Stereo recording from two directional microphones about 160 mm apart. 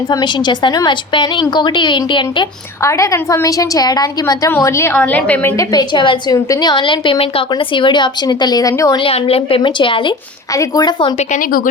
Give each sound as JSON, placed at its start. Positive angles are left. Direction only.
{"t": 0.1, "sound": "a woman's voice", "side_deg": 25}
{"t": 2.8, "sound": "a woman's voice", "side_deg": 20}
{"t": 5.7, "sound": "a woman's voice", "side_deg": 30}
{"t": 9.0, "sound": "a woman's voice", "side_deg": 35}
{"t": 11.2, "sound": "a woman's voice", "side_deg": 55}